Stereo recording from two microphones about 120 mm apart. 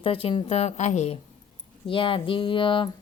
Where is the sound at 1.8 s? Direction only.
45° left (ahead or behind).